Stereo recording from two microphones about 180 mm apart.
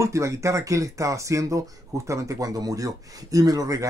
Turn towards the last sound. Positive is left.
turn(degrees=-20)  # may be behind; listen again after turning